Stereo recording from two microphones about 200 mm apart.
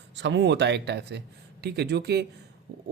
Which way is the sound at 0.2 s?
65° right (ahead or behind).